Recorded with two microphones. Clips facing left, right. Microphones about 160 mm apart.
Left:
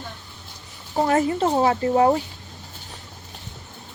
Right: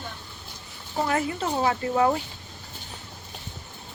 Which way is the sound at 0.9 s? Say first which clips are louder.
Left 6 dB; 40° left (ahead or behind).